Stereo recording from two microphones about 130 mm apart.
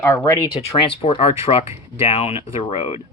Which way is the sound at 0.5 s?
45° left (ahead or behind).